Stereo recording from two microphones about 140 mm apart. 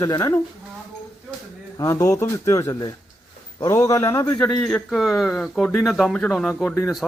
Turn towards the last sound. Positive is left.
turn(degrees=0)  # may be behind; listen again after turning